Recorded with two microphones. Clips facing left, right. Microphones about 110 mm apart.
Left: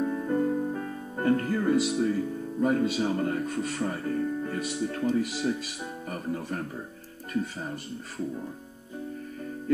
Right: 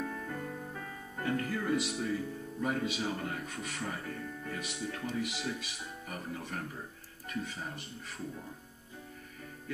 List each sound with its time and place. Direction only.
0.0 s music: 30° left (ahead or behind)
1.9 s speech: 35° left (ahead or behind)